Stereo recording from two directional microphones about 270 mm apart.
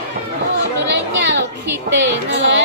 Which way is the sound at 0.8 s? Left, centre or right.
Right.